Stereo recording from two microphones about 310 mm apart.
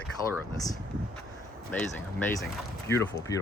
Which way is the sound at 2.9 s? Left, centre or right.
Centre.